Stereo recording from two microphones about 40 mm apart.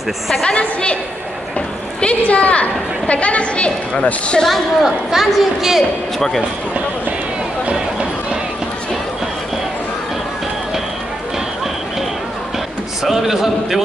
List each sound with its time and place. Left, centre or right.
0.6 s a woman's voice: left
2.2 s a woman's voice: left
4.5 s a woman's voice: centre
6.1 s speech: centre
13.0 s a woman's voice: centre